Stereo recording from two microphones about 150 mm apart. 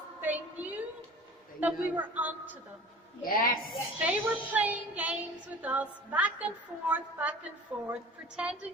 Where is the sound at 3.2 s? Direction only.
70° left (ahead or behind).